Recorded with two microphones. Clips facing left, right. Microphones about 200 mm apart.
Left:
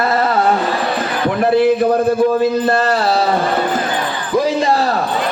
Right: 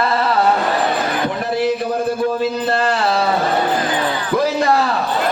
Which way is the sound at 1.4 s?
55° left (ahead or behind).